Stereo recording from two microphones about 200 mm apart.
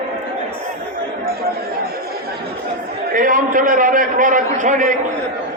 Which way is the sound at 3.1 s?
40° right (ahead or behind).